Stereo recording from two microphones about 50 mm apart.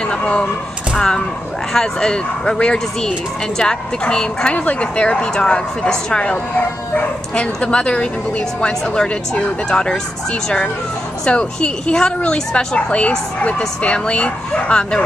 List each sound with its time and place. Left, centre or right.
0.1 s speech: left
6.2 s speech: left
11.2 s speech: centre